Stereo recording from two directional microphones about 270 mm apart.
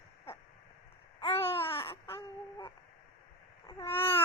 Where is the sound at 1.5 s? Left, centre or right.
Centre.